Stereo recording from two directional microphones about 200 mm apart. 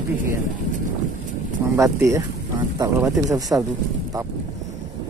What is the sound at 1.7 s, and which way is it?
Speech, 15° right (ahead or behind).